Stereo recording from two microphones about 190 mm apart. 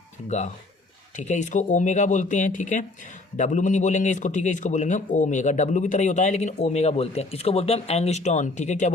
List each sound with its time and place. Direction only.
0.3 s a man's voice: 35° left (ahead or behind)